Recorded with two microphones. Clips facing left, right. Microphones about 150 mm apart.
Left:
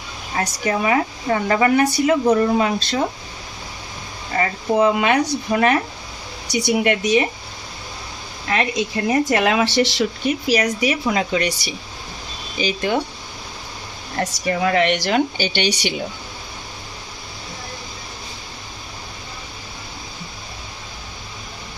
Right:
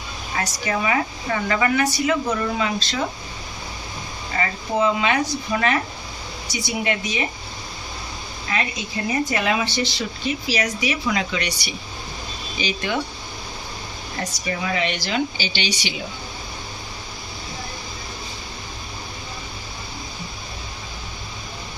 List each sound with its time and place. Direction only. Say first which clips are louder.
0.3 s speech: left 3 dB; 40° left (ahead or behind)
1.8 s speech: left 4 dB; 55° left (ahead or behind)
2.0 s speech: left 6 dB; 35° left (ahead or behind)
4.3 s a sound: left 4 dB; 40° left (ahead or behind)
4.9 s speech: left 4 dB; 55° left (ahead or behind)
6.5 s speech: left 7 dB; 60° left (ahead or behind)
8.4 s speech: left 6 dB; 65° left (ahead or behind); by 10.3 s 85° left
10.8 s speech: left 4 dB; 40° left (ahead or behind)
12.5 s speech: left 5 dB; 45° left (ahead or behind)
14.2 s speech: left 7 dB; 60° left (ahead or behind)